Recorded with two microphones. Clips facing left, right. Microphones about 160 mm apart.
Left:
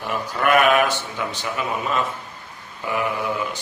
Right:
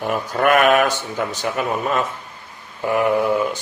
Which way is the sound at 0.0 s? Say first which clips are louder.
Right 4 dB; 50° right (ahead or behind).